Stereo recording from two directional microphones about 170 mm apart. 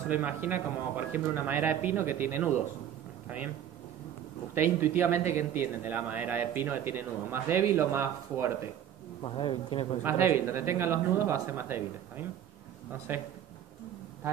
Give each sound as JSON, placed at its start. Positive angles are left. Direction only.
{"t": 0.1, "sound": "speech", "side_deg": -10}
{"t": 4.6, "sound": "speech", "side_deg": -15}
{"t": 9.2, "sound": "speech", "side_deg": 30}
{"t": 10.0, "sound": "speech", "side_deg": -15}
{"t": 13.1, "sound": "speech", "side_deg": -10}